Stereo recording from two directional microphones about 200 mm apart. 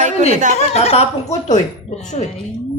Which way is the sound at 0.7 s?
30° left (ahead or behind).